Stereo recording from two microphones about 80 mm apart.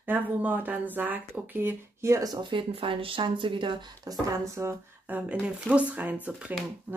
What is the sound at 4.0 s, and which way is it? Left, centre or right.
Speech, right.